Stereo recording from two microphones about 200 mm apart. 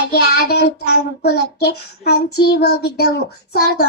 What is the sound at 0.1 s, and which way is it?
Child singing, 50° left (ahead or behind).